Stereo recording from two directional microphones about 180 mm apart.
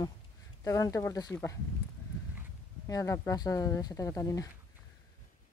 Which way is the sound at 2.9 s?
20° left (ahead or behind).